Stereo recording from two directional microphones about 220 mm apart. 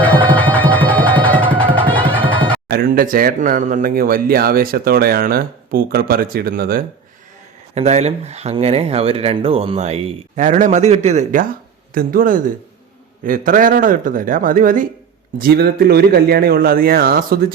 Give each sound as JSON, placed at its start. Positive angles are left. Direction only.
{"t": 0.0, "sound": "music", "side_deg": 10}
{"t": 2.6, "sound": "speech", "side_deg": -45}
{"t": 7.8, "sound": "speech", "side_deg": -30}